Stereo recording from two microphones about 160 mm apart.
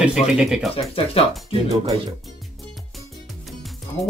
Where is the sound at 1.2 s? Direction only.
35° left (ahead or behind).